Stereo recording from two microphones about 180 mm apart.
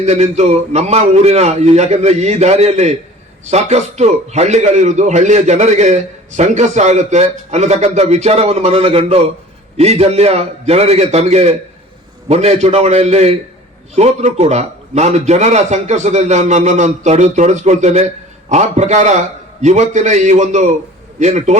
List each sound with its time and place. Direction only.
0.0 s a man's voice: 40° right (ahead or behind)